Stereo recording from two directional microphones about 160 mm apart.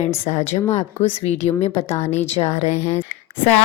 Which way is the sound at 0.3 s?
45° left (ahead or behind).